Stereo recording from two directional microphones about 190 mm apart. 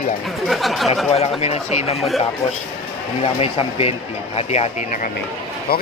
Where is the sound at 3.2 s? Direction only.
30° left (ahead or behind).